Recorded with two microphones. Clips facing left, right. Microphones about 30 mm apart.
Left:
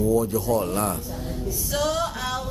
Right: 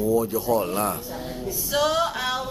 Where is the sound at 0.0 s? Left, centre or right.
Centre.